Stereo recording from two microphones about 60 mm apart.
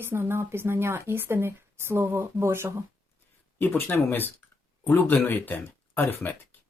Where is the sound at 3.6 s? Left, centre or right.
Left.